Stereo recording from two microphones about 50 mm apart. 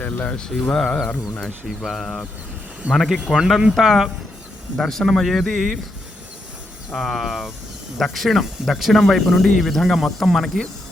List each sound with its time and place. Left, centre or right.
0.0 s speech: left
0.3 s speech: centre
3.3 s speech: centre
6.9 s speech: centre